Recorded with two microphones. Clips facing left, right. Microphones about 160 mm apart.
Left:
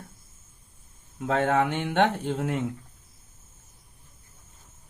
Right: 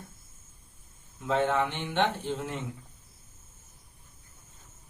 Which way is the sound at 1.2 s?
55° left (ahead or behind).